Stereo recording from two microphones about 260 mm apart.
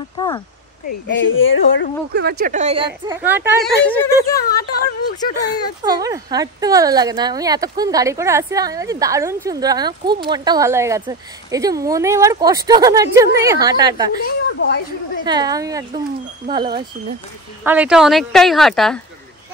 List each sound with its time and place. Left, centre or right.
0.2 s speech: centre
1.0 s speech: left
2.1 s speech: right
3.2 s speech: centre
3.8 s speech: centre
5.9 s speech: centre
14.2 s a woman's voice: left
15.2 s speech: centre
17.6 s speech: centre